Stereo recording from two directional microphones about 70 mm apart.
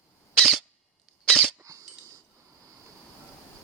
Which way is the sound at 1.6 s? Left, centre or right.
Right.